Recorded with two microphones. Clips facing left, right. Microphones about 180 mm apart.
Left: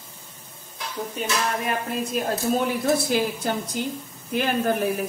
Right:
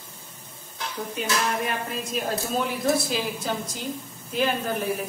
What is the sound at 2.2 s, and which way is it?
Speech, 55° left (ahead or behind).